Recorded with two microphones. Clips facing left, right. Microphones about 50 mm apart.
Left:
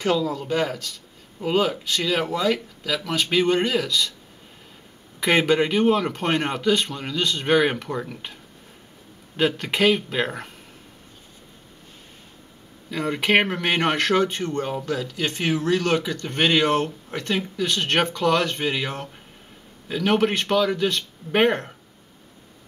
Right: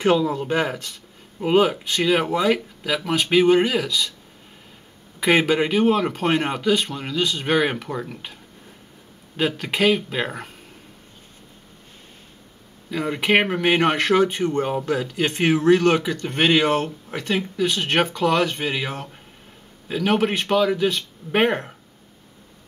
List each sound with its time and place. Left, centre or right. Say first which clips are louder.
0.0 s speech: right 4 dB; right; by 4.1 s centre
5.2 s a man's voice: right 1 dB; centre
9.4 s a man's voice: even; centre
12.9 s a man's voice: right 1 dB; centre